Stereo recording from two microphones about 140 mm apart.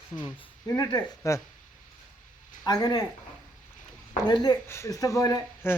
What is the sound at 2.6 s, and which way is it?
Speech, 30° left (ahead or behind).